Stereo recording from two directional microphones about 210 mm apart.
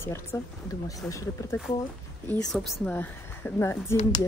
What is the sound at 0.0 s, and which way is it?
Speech, 10° left (ahead or behind).